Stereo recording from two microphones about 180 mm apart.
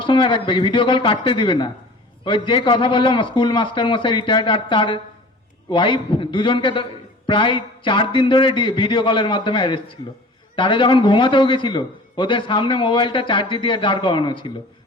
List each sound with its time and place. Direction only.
0.0 s a man's voice: 30° left (ahead or behind)